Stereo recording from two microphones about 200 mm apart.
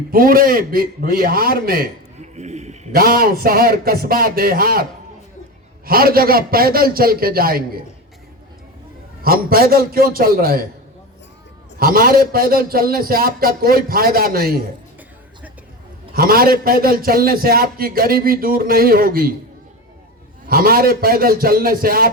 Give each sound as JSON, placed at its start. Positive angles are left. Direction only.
{"t": 0.1, "sound": "a man's voice", "side_deg": -45}
{"t": 2.2, "sound": "a sound", "side_deg": -35}
{"t": 2.9, "sound": "a man's voice", "side_deg": -50}
{"t": 9.2, "sound": "a man's voice", "side_deg": -45}
{"t": 11.8, "sound": "a man's voice", "side_deg": -45}
{"t": 16.1, "sound": "a man's voice", "side_deg": -50}
{"t": 20.5, "sound": "a man's voice", "side_deg": -50}